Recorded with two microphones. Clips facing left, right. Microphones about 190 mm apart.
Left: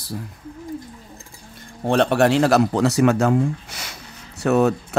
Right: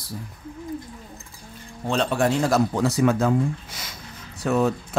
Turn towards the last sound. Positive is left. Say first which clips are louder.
# left 4 dB
turn(degrees=70)  # may be behind; listen again after turning